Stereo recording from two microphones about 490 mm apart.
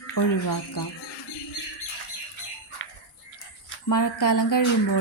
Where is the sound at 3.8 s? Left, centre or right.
Left.